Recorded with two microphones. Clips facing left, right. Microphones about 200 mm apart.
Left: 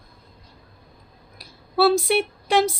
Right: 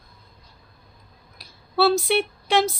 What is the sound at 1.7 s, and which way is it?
Speech, 5° left (ahead or behind).